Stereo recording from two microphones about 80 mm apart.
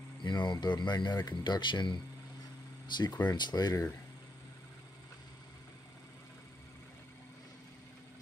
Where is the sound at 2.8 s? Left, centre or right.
Left.